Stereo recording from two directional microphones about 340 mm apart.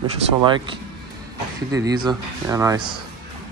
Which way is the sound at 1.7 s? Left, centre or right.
Centre.